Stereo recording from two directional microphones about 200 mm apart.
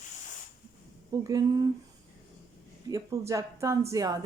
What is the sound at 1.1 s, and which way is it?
Speech, 20° right (ahead or behind).